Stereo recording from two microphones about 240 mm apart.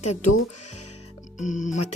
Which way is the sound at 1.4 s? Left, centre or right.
Left.